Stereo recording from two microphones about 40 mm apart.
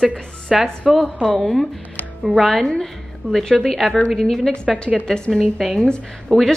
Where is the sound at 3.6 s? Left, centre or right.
Centre.